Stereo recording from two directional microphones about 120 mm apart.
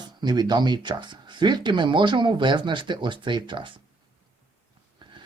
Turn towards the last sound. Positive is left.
turn(degrees=-40)  # may be behind; listen again after turning